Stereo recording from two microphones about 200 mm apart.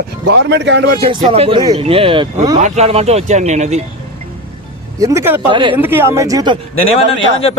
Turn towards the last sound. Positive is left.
turn(degrees=30)  # may be behind; listen again after turning